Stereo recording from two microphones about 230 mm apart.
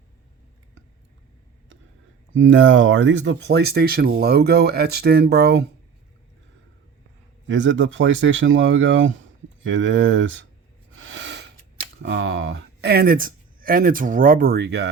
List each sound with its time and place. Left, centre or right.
2.3 s speech: right
7.4 s speech: right